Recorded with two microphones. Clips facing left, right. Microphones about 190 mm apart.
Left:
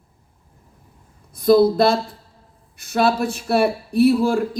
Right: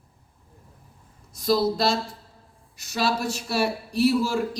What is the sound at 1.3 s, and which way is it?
A man's voice, 55° left (ahead or behind).